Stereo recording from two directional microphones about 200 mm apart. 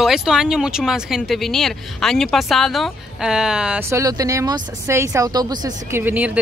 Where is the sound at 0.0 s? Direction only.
Centre (ahead or behind).